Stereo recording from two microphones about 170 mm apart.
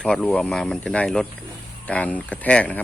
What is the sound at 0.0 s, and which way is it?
Speech, 5° left (ahead or behind).